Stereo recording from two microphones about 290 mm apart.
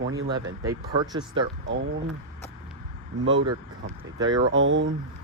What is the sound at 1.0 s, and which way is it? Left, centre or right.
Speech, centre.